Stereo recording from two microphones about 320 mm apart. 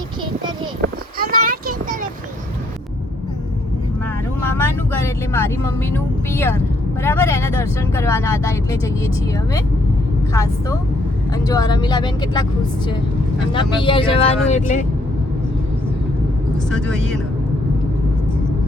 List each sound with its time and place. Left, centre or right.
0.8 s a sound: right
4.6 s vehicle: centre
6.3 s speech: centre
10.3 s speech: centre
13.5 s speech: centre
16.6 s speech: centre